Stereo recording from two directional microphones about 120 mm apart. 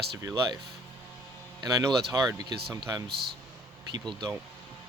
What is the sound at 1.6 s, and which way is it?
Speech, 30° right (ahead or behind).